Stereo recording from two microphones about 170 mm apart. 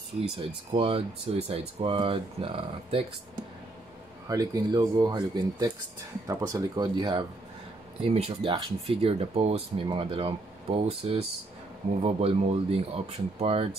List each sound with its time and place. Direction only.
0.4 s speech: 35° right (ahead or behind)
4.3 s speech: 20° right (ahead or behind)